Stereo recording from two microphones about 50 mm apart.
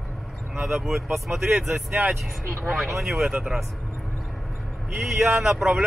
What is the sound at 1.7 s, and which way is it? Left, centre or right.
Speech, right.